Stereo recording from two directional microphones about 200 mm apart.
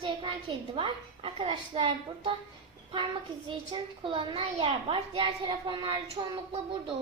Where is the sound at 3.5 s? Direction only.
25° right (ahead or behind).